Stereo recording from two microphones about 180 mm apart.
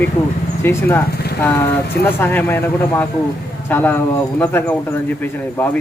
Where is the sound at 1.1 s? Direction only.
60° left (ahead or behind).